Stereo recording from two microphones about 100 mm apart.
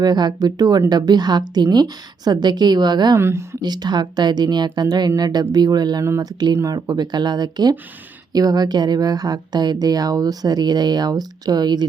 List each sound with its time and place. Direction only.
0.0 s a woman's voice: 45° right (ahead or behind)
3.2 s speech: 25° right (ahead or behind)
3.6 s a woman's voice: 45° right (ahead or behind)